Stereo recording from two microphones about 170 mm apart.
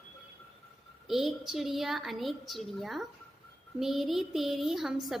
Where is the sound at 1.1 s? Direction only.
Centre (ahead or behind).